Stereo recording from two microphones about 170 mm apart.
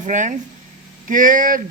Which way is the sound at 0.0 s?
45° right (ahead or behind).